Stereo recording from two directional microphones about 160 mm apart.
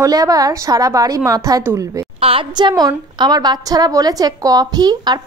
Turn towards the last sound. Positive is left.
turn(degrees=-25)  # may be behind; listen again after turning